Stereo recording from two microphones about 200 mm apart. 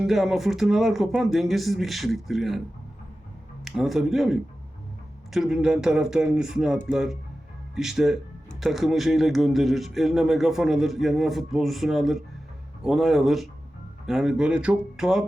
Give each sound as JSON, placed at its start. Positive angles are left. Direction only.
{"t": 0.0, "sound": "speech", "side_deg": 0}
{"t": 3.6, "sound": "speech", "side_deg": 0}